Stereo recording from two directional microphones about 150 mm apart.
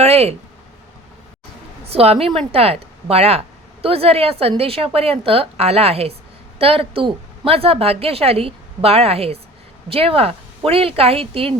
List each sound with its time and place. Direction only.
0.0 s a woman's voice: 45° right (ahead or behind)
1.9 s a woman's voice: 40° right (ahead or behind)